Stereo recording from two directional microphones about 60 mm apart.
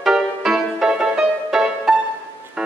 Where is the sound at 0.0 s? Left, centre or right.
Centre.